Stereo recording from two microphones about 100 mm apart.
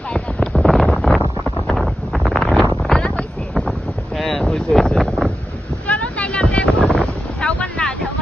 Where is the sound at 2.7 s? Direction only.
5° left (ahead or behind).